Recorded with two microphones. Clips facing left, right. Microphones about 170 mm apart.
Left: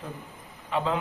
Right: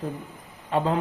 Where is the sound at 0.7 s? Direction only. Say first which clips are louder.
Right 4 dB; 45° right (ahead or behind).